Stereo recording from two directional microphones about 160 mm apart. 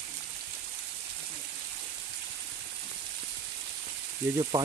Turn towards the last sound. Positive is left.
turn(degrees=-25)  # may be behind; listen again after turning